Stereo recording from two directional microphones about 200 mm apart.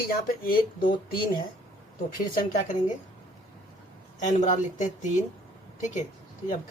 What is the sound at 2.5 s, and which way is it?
Speech, 40° left (ahead or behind).